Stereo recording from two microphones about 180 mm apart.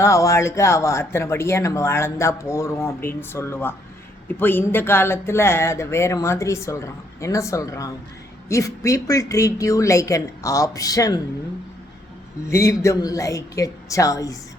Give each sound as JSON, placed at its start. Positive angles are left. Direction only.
{"t": 0.0, "sound": "speech", "side_deg": 15}
{"t": 12.5, "sound": "speech", "side_deg": 15}